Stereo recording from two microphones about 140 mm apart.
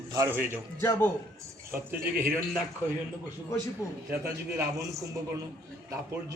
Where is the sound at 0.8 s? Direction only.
20° left (ahead or behind).